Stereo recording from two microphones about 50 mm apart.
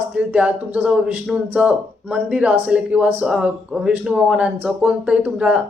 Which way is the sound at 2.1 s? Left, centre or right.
Centre.